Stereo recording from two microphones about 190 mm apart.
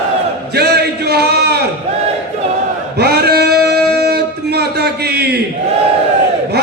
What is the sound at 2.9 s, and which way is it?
Singing, 55° right (ahead or behind).